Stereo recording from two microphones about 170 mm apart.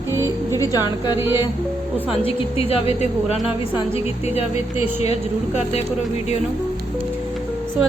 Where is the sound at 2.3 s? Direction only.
35° left (ahead or behind).